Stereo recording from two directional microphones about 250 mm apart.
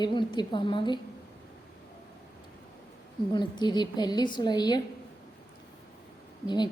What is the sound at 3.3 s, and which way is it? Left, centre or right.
A woman's voice, centre.